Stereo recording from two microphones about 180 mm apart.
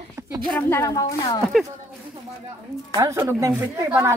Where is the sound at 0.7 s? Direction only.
20° left (ahead or behind).